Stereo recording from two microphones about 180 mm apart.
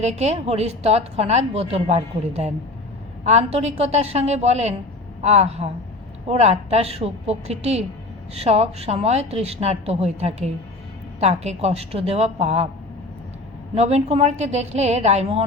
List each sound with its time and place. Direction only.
0.0 s a woman's voice: 40° right (ahead or behind)
13.7 s a woman's voice: 35° right (ahead or behind)